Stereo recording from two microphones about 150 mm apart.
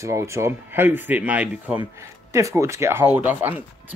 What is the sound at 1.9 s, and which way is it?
Speech, 20° right (ahead or behind).